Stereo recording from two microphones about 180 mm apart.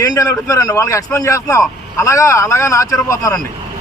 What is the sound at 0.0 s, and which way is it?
A man's voice, 20° left (ahead or behind).